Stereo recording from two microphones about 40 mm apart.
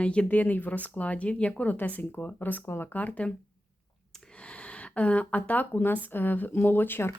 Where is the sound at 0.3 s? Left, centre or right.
Left.